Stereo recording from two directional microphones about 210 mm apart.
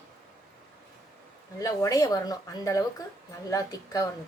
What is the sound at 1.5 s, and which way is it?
Speech, 15° left (ahead or behind).